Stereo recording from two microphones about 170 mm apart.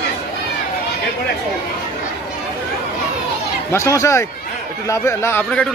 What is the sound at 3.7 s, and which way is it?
A man's voice, 20° left (ahead or behind).